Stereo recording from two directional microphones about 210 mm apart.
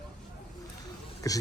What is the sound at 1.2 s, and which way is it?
Speech, 15° left (ahead or behind).